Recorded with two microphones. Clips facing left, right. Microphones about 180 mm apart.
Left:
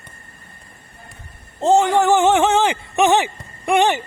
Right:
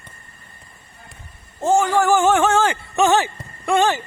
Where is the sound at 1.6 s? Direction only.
20° left (ahead or behind).